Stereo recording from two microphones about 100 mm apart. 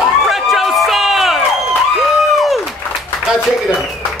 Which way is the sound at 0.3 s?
Centre (ahead or behind).